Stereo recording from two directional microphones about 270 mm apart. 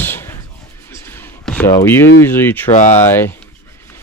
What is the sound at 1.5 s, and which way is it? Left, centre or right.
Speech, centre.